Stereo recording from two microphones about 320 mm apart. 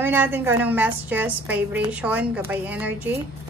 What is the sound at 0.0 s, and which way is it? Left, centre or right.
A woman's voice, centre.